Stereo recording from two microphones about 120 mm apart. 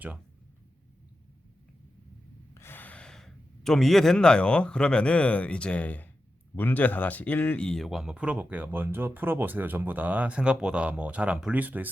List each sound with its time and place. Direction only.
2.6 s speech: 20° left (ahead or behind); by 11.9 s 15° right (ahead or behind)